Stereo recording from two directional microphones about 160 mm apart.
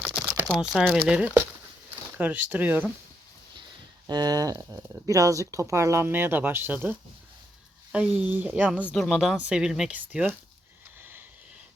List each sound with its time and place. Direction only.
0.0 s crumpling: centre (ahead or behind)
0.4 s speech: centre (ahead or behind)
4.0 s speech: 25° right (ahead or behind)
7.9 s speech: 5° right (ahead or behind)